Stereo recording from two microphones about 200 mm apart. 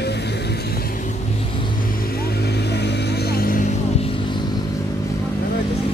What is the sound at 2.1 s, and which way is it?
Vehicle, 50° left (ahead or behind).